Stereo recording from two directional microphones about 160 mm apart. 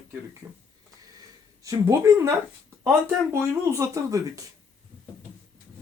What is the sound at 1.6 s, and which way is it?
Speech, 15° right (ahead or behind).